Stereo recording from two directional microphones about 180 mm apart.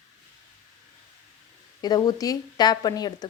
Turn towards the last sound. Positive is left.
turn(degrees=20)  # may be behind; listen again after turning